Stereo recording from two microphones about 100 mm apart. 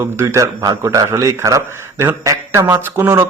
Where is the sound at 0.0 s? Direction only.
25° right (ahead or behind).